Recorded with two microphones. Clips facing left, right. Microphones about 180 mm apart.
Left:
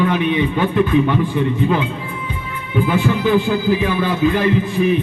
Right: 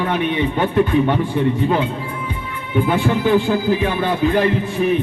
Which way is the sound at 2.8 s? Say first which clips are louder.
Left 1 dB; 50° right (ahead or behind).